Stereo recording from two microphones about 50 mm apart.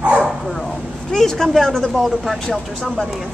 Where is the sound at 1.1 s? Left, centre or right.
Centre.